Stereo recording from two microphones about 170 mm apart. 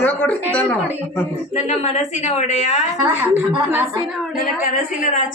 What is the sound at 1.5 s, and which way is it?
A woman's voice, 40° left (ahead or behind).